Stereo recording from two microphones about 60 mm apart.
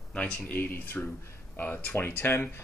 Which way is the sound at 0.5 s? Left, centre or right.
Left.